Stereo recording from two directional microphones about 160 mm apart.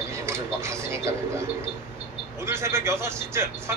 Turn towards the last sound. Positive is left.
turn(degrees=-15)  # may be behind; listen again after turning